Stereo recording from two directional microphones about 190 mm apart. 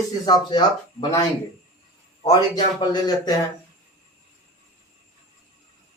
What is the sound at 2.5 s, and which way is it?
Speech, 20° left (ahead or behind).